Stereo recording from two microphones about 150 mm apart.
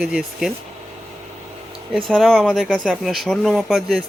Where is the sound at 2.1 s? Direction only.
5° left (ahead or behind).